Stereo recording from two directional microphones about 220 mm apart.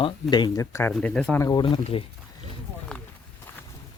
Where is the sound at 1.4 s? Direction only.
20° left (ahead or behind).